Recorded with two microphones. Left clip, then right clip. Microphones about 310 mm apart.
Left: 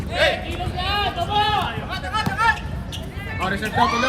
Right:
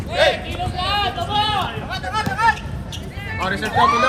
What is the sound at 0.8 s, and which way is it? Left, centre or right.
Speech, centre.